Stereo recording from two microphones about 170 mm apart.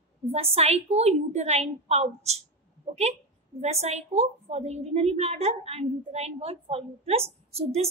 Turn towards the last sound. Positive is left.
turn(degrees=-40)  # may be behind; listen again after turning